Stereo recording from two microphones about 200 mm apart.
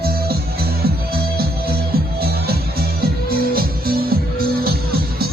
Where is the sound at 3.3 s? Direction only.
50° right (ahead or behind).